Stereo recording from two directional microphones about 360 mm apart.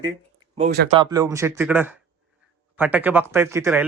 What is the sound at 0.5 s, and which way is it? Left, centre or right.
Speech, right.